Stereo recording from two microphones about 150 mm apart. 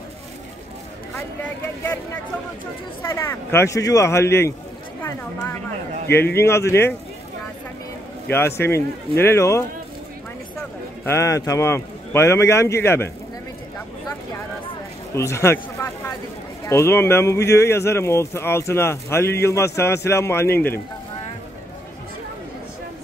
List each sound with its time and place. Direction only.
3.0 s speech: 15° left (ahead or behind)
8.3 s speech: 15° left (ahead or behind)
11.1 s speech: 20° left (ahead or behind)
15.1 s a sound: 20° left (ahead or behind)
16.6 s speech: 15° left (ahead or behind)